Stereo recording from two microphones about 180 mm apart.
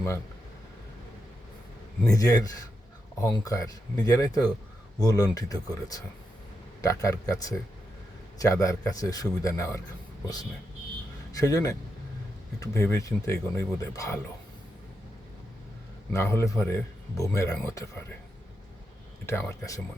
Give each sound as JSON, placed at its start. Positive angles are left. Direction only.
{"t": 2.1, "sound": "speech", "side_deg": 20}
{"t": 11.3, "sound": "speech", "side_deg": 20}
{"t": 16.1, "sound": "speech", "side_deg": 15}
{"t": 19.2, "sound": "speech", "side_deg": 15}